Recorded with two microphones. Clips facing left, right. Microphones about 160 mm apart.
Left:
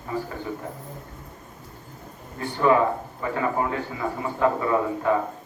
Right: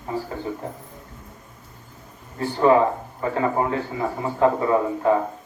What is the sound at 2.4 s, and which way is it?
A man's voice, 30° right (ahead or behind).